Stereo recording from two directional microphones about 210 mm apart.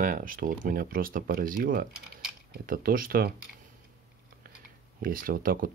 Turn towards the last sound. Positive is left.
turn(degrees=-40)  # may be behind; listen again after turning